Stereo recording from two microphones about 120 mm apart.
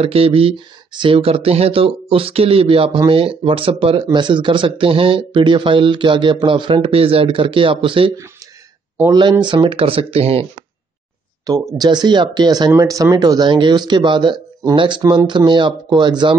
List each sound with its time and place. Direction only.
0.0 s speech: 50° right (ahead or behind)
9.1 s speech: 40° right (ahead or behind)
11.4 s speech: 35° right (ahead or behind)